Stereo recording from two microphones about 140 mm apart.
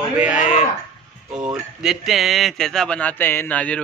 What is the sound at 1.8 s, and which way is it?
Speech, 5° right (ahead or behind).